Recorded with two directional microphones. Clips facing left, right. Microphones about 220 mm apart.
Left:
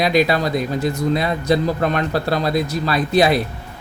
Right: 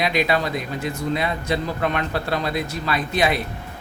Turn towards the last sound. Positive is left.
turn(degrees=35)  # may be behind; listen again after turning